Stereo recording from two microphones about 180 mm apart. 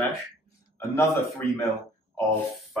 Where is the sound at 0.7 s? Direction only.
15° left (ahead or behind).